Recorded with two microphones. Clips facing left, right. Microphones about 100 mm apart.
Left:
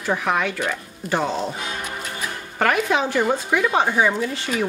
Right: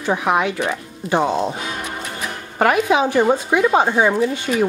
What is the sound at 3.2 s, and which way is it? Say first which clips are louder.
Speech: right 4 dB; 25° right (ahead or behind).